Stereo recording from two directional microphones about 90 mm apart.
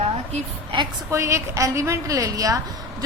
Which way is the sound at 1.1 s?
35° right (ahead or behind).